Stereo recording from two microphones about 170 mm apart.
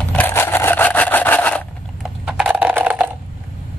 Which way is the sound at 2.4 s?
5° right (ahead or behind).